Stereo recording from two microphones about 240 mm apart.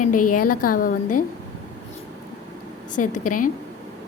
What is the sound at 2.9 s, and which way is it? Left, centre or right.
Speech, left.